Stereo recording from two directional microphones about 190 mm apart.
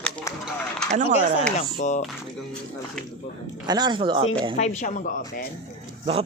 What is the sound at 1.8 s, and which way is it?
Speech, 40° left (ahead or behind).